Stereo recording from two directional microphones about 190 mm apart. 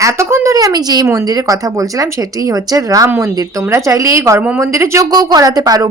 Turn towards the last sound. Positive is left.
turn(degrees=-20)  # may be behind; listen again after turning